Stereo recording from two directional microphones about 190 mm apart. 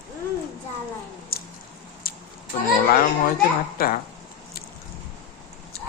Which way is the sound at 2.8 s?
50° left (ahead or behind).